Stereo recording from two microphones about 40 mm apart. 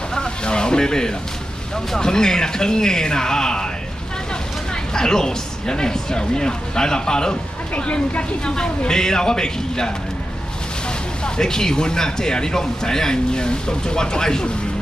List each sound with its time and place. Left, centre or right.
0.1 s a sound: centre
1.9 s speech: centre
4.9 s speech: centre
7.7 s speech: left
11.2 s speech: centre